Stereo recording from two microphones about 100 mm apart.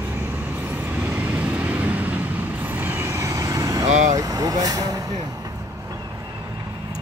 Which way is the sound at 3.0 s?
30° right (ahead or behind).